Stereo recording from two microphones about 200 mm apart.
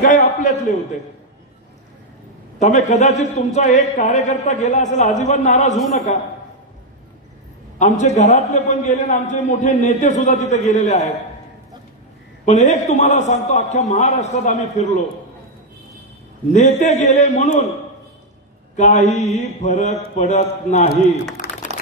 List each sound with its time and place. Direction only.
0.0 s a man's voice: 40° left (ahead or behind)
2.9 s a man's voice: 35° left (ahead or behind)
7.8 s a man's voice: 35° left (ahead or behind)
12.4 s a man's voice: 35° left (ahead or behind)
16.5 s a man's voice: 35° left (ahead or behind)
18.8 s a man's voice: 35° left (ahead or behind)
21.4 s a sound: 45° left (ahead or behind)